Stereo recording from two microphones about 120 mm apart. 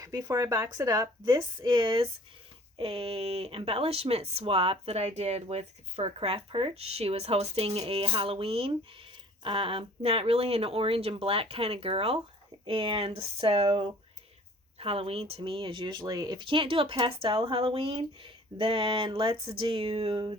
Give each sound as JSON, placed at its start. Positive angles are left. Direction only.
{"t": 0.0, "sound": "speech", "side_deg": -30}
{"t": 1.2, "sound": "speech", "side_deg": -40}
{"t": 16.4, "sound": "speech", "side_deg": -45}